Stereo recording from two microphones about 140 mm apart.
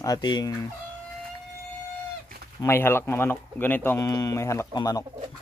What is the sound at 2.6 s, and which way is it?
Speech, 15° left (ahead or behind).